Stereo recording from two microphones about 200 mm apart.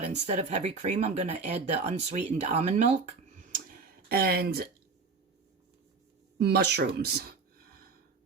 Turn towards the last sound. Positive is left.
turn(degrees=-50)  # may be behind; listen again after turning